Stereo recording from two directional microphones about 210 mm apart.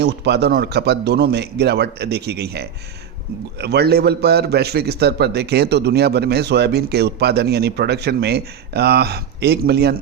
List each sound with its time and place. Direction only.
0.0 s a man's voice: 55° right (ahead or behind)